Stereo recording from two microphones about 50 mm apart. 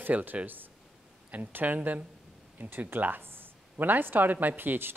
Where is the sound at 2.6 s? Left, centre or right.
Right.